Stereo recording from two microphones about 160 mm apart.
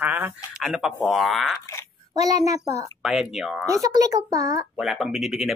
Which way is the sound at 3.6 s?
20° right (ahead or behind).